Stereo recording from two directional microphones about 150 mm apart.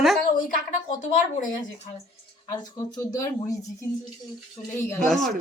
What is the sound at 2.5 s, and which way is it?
Speech, 25° left (ahead or behind).